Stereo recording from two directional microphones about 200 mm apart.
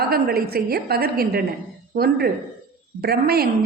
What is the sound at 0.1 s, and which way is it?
A woman's voice, 50° right (ahead or behind).